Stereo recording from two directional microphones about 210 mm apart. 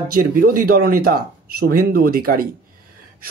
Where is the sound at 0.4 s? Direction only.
45° right (ahead or behind).